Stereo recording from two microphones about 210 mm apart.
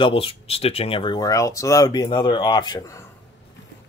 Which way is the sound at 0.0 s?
25° left (ahead or behind).